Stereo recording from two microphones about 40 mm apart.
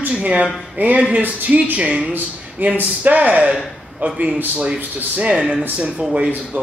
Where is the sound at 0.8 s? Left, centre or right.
Right.